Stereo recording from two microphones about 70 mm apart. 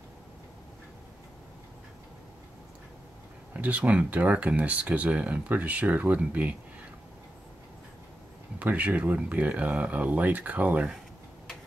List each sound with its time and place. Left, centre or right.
3.5 s speech: right
8.5 s speech: right